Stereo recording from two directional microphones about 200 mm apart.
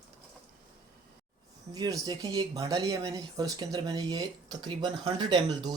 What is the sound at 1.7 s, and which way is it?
Speech, 15° right (ahead or behind).